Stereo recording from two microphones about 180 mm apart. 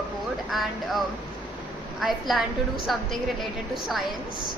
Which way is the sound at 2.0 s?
Centre (ahead or behind).